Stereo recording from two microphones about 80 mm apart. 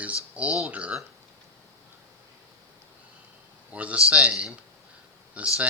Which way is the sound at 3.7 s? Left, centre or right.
Centre.